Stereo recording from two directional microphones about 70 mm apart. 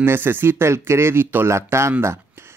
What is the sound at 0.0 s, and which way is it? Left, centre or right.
Speech, right.